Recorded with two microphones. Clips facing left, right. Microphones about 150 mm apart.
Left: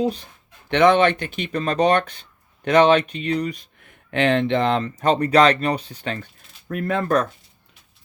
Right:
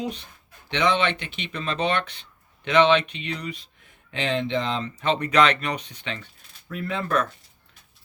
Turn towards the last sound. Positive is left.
turn(degrees=45)  # may be behind; listen again after turning